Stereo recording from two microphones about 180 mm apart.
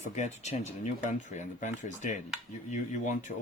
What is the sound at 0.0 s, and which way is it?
Speech, 40° left (ahead or behind).